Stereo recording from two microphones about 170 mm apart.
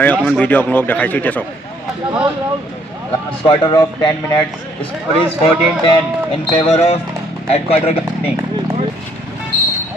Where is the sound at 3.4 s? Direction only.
30° left (ahead or behind).